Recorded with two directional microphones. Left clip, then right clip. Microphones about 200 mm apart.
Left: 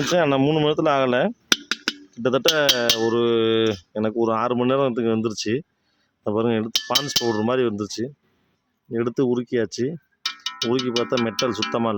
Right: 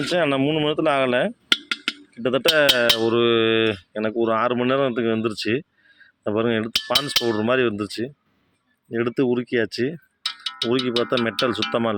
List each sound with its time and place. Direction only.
0.1 s speech: 20° left (ahead or behind)